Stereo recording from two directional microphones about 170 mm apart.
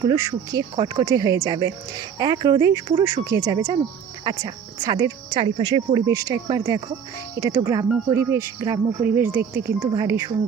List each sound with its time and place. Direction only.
0.0 s speech: 25° right (ahead or behind)